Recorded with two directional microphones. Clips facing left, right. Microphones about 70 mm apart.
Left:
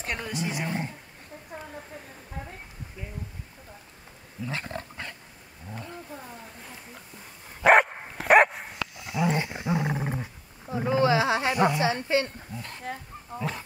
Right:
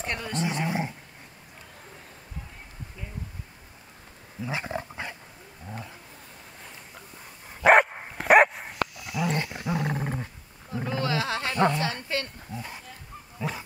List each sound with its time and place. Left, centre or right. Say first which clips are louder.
0.0 s speech: right 2 dB; centre
0.7 s speech: right 2 dB; centre
4.5 s dog: right 3 dB; centre
5.7 s wild animals: left 1 dB; centre
7.6 s dog: even; centre
8.9 s dog: left 2 dB; left
9.9 s roar: even; centre
10.7 s a sound: left 6 dB; centre
12.5 s speech: right 4 dB; centre